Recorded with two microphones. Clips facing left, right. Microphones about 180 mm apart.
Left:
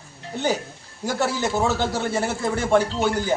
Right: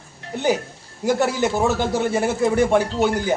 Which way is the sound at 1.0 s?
15° right (ahead or behind).